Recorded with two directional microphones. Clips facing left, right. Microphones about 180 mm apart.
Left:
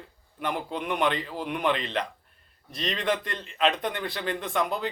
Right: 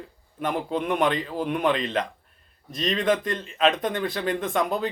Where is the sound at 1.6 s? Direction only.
20° right (ahead or behind).